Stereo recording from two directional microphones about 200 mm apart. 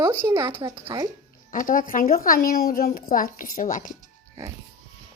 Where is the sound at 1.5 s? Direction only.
40° left (ahead or behind).